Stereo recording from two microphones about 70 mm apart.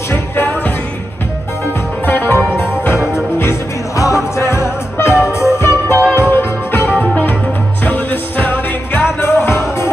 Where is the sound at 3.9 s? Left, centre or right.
Left.